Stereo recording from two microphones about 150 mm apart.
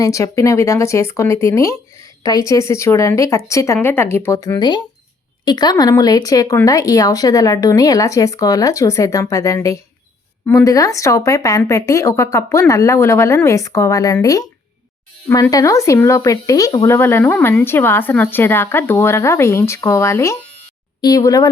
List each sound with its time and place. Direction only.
0.0 s speech: 20° left (ahead or behind)